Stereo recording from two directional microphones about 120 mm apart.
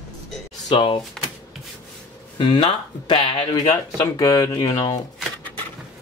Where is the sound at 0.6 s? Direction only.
45° left (ahead or behind).